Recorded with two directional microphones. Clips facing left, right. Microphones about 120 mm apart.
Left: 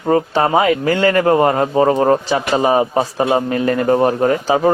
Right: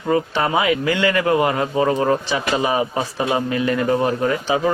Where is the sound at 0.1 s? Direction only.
40° left (ahead or behind).